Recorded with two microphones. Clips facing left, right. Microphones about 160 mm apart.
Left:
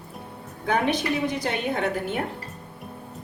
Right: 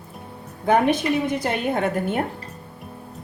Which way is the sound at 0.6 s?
55° right (ahead or behind).